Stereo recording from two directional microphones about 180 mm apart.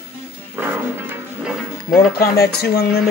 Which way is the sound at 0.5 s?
10° right (ahead or behind).